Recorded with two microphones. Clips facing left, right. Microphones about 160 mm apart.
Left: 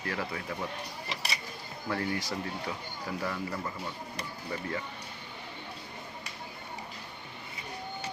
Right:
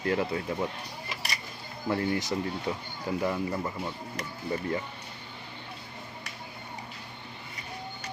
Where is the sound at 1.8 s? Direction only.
20° right (ahead or behind).